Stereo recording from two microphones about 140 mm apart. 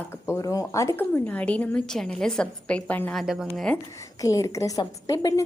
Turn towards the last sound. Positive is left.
turn(degrees=25)  # may be behind; listen again after turning